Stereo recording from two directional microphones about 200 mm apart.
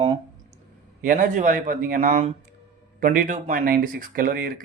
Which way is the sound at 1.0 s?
40° right (ahead or behind).